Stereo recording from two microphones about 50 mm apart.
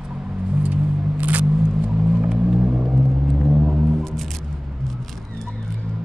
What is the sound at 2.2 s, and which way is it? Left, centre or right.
Vehicle, centre.